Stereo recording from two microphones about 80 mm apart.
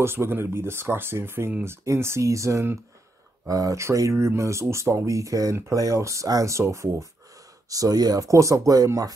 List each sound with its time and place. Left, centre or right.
0.0 s speech: right
3.4 s speech: right
7.7 s speech: right